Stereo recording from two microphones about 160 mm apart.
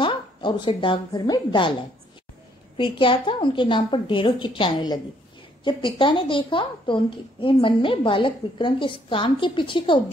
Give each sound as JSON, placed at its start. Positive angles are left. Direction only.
{"t": 0.0, "sound": "a woman's voice", "side_deg": 30}
{"t": 2.8, "sound": "a woman's voice", "side_deg": 30}